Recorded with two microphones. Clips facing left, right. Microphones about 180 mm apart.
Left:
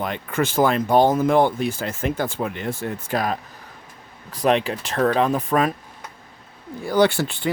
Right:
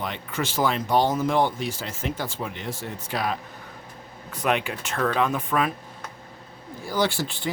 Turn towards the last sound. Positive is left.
turn(degrees=60)  # may be behind; listen again after turning